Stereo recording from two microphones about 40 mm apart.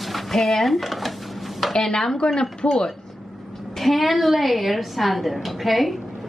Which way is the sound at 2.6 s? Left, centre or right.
Left.